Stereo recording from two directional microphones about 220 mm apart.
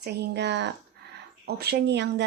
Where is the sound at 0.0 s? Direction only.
50° right (ahead or behind).